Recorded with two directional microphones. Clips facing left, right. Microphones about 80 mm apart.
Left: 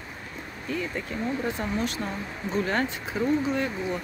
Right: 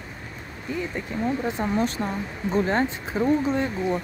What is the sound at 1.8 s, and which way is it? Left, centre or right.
Speech, right.